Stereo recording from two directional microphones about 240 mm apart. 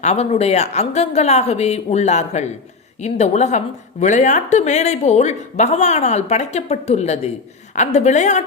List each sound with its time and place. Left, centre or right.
0.0 s speech: left